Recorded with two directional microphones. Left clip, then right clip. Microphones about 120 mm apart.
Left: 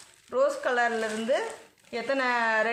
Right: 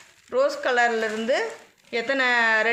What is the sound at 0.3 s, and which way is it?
Speech, 60° right (ahead or behind).